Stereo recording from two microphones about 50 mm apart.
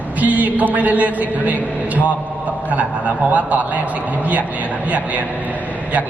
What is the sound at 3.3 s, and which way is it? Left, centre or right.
Speech, right.